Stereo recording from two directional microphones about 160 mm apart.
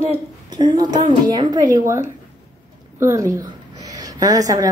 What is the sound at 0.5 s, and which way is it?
A woman's voice, 25° right (ahead or behind).